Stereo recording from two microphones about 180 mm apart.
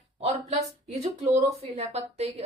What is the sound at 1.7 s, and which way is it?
Speech, 35° right (ahead or behind).